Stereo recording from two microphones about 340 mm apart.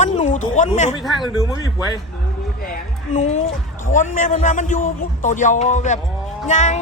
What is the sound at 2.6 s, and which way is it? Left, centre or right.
A man's voice, left.